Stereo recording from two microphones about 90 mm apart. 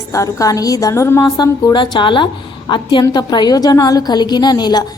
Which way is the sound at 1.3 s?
50° left (ahead or behind).